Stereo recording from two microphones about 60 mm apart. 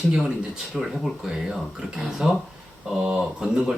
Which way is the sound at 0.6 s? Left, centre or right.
Centre.